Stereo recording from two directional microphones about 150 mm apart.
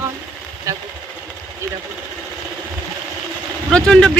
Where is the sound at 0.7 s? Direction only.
20° right (ahead or behind).